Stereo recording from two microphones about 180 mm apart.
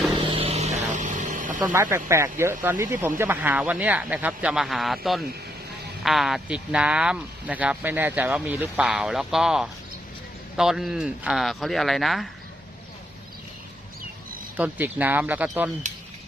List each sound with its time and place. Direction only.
0.3 s vehicle: 30° right (ahead or behind)
1.6 s speech: 15° right (ahead or behind)
14.5 s speech: 10° right (ahead or behind)